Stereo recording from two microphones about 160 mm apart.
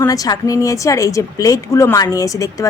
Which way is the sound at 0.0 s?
25° left (ahead or behind).